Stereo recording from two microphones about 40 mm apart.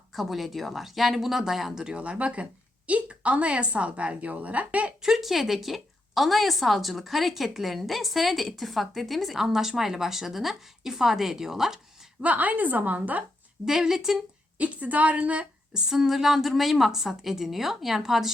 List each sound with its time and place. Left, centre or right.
0.1 s a woman's voice: centre
1.7 s speech: centre
2.0 s a woman's voice: right
5.0 s a woman's voice: centre
12.2 s a woman's voice: right
13.7 s speech: centre
14.6 s a woman's voice: right
15.9 s speech: centre